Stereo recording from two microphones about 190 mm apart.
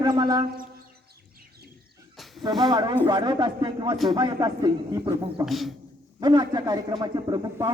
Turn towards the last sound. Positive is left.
turn(degrees=-20)  # may be behind; listen again after turning